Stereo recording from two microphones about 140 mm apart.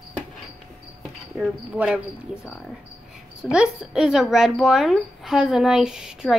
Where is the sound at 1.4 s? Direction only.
10° right (ahead or behind).